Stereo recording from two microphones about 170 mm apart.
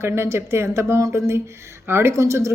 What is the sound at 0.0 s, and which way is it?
Speech, 15° right (ahead or behind).